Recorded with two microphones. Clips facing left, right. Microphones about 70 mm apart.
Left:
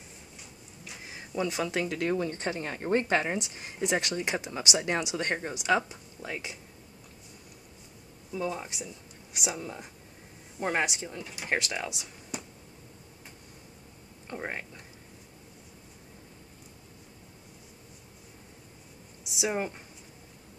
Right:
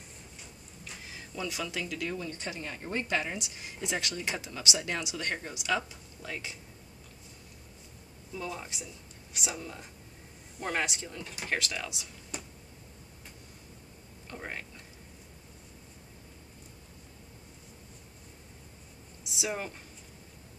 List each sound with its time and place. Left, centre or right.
1.0 s speech: left
8.3 s speech: centre
11.4 s speech: left
14.3 s speech: left
19.3 s speech: left